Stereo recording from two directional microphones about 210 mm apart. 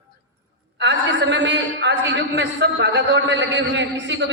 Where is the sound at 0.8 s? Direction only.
55° right (ahead or behind).